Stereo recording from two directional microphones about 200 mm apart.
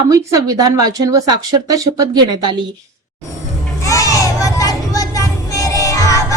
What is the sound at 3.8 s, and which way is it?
Music, 15° left (ahead or behind).